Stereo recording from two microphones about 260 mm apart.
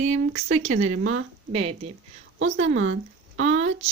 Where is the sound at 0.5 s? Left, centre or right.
Right.